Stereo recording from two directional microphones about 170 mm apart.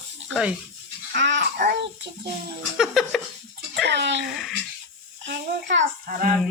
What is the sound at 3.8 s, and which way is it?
A child's voice, 90° right.